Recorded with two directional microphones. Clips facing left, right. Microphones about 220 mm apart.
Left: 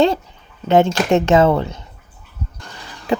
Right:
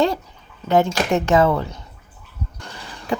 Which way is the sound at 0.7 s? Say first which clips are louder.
Left 4 dB; 25° left (ahead or behind).